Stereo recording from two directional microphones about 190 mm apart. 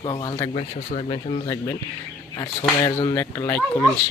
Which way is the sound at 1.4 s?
20° left (ahead or behind).